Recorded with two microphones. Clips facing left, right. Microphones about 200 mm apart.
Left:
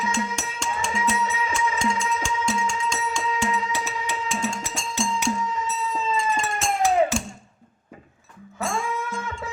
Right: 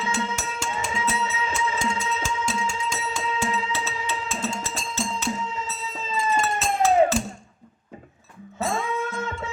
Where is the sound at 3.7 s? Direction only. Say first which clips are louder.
Left 1 dB; 15° left (ahead or behind).